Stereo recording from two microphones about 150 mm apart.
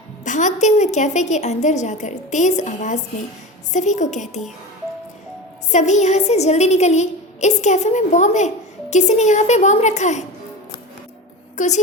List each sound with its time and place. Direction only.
0.3 s a woman's voice: 55° left (ahead or behind)
5.7 s a woman's voice: 50° left (ahead or behind)
11.5 s a woman's voice: 50° left (ahead or behind)